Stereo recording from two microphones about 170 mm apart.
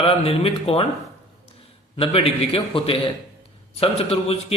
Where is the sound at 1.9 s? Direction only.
35° left (ahead or behind).